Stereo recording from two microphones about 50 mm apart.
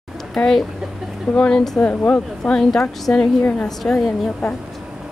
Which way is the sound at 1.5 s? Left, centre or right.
Centre.